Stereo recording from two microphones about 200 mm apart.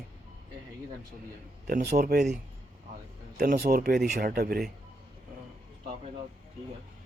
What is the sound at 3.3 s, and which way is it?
Speech, 45° right (ahead or behind).